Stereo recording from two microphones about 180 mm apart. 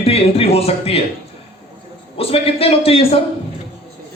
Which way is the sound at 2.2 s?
30° left (ahead or behind).